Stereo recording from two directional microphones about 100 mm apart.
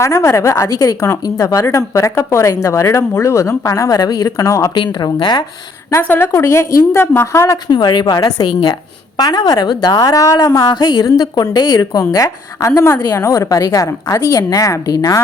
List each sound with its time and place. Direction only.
0.0 s a woman's voice: 30° left (ahead or behind)
4.7 s a woman's voice: 50° left (ahead or behind)
6.0 s a woman's voice: 20° left (ahead or behind)
7.7 s a woman's voice: 50° left (ahead or behind)